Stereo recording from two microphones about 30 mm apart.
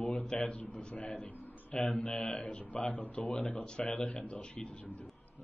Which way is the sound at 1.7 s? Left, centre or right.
Left.